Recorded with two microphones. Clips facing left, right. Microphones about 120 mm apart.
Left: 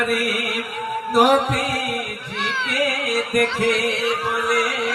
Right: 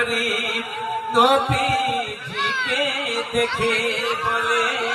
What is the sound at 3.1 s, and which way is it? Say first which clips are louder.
Mantra: left 1 dB; centre (ahead or behind).